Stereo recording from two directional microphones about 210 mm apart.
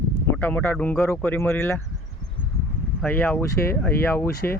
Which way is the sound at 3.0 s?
10° left (ahead or behind).